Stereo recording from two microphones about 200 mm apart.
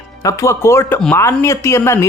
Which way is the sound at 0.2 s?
15° left (ahead or behind).